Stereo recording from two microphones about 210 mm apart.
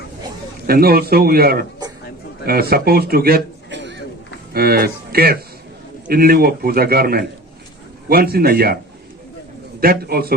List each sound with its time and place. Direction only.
0.7 s a man's voice: 45° right (ahead or behind)
4.5 s a man's voice: 45° right (ahead or behind)
9.8 s a man's voice: 45° right (ahead or behind)